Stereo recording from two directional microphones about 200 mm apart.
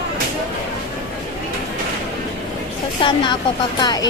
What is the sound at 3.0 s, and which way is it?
Speech, 25° left (ahead or behind).